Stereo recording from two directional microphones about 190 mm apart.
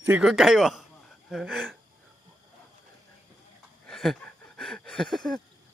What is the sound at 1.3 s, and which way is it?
Speech, centre (ahead or behind).